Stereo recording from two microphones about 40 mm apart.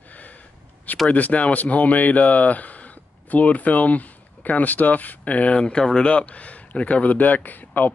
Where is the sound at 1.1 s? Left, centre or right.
Left.